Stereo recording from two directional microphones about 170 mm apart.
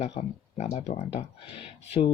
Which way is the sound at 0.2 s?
40° left (ahead or behind).